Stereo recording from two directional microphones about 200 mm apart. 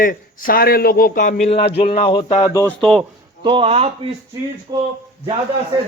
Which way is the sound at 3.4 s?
25° right (ahead or behind).